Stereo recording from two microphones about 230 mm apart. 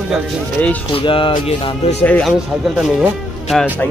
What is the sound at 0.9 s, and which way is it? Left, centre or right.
Speech, left.